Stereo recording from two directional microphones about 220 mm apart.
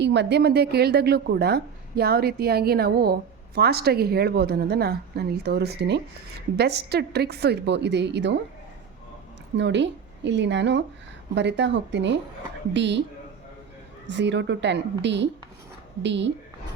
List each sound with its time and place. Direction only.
0.0 s a woman's voice: 50° right (ahead or behind)
9.6 s a woman's voice: 55° right (ahead or behind)
14.1 s a woman's voice: 55° right (ahead or behind)